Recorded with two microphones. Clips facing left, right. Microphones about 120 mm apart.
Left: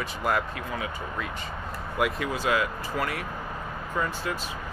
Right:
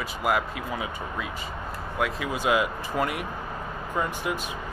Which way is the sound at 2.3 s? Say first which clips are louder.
Right 2 dB; 15° right (ahead or behind).